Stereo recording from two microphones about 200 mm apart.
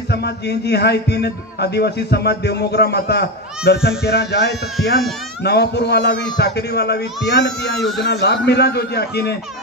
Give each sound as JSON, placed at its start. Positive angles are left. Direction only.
{"t": 0.1, "sound": "a man's voice", "side_deg": 55}